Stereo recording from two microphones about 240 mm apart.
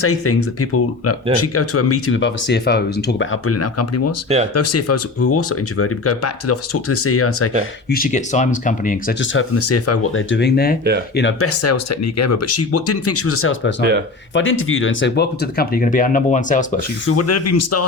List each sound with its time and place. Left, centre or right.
0.0 s speech: left
3.4 s speech: left
7.9 s speech: left
9.2 s speech: left
17.1 s speech: left